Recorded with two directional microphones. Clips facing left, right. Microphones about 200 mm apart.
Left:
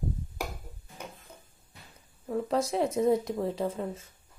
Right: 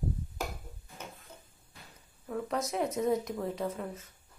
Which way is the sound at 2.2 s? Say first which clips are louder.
Left 5 dB; 30° left (ahead or behind).